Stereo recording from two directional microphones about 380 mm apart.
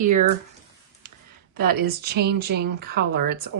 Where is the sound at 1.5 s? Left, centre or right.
Right.